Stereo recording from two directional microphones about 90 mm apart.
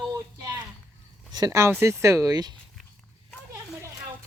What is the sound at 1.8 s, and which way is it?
Speech, 30° right (ahead or behind).